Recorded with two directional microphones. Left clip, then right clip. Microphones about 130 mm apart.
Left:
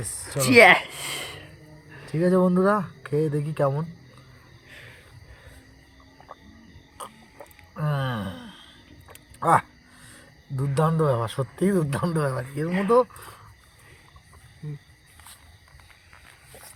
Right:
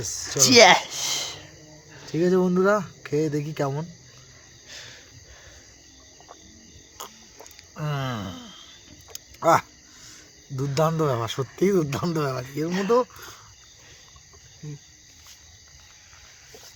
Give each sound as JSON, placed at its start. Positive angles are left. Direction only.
{"t": 0.0, "sound": "speech", "side_deg": -25}
{"t": 0.5, "sound": "speech", "side_deg": -5}
{"t": 0.9, "sound": "a sound", "side_deg": 0}
{"t": 2.1, "sound": "speech", "side_deg": -20}
{"t": 4.7, "sound": "a sound", "side_deg": -25}
{"t": 7.8, "sound": "gasp", "side_deg": -30}
{"t": 9.0, "sound": "speech", "side_deg": -25}